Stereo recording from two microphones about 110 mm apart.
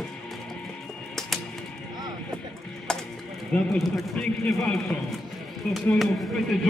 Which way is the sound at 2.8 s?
5° left (ahead or behind).